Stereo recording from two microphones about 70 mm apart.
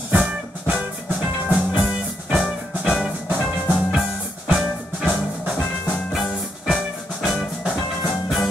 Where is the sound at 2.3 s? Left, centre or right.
Centre.